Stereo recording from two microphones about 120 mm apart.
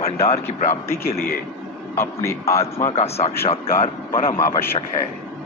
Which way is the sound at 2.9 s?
60° left (ahead or behind).